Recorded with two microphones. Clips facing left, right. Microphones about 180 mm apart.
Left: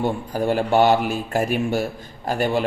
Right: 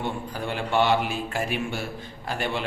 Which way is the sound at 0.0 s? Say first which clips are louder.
Left 8 dB; 40° left (ahead or behind).